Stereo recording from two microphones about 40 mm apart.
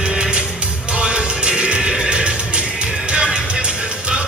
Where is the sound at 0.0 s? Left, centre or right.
Centre.